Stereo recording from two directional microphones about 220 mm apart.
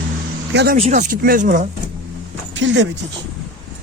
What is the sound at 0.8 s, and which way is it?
Speech, 35° right (ahead or behind).